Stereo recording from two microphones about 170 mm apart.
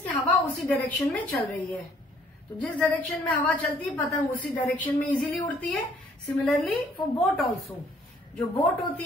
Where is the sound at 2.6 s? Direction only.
10° left (ahead or behind).